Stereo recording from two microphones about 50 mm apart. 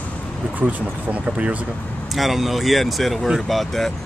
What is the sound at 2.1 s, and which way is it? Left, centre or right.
Speech, centre.